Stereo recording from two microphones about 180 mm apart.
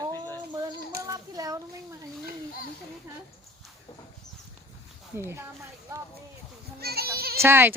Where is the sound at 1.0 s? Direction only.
20° right (ahead or behind).